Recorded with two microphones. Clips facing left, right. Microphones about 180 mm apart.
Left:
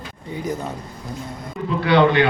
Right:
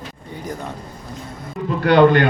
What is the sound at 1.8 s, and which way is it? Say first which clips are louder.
Speech: right 3 dB; 45° right (ahead or behind).